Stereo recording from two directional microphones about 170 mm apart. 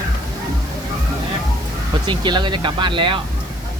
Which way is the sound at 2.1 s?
25° right (ahead or behind).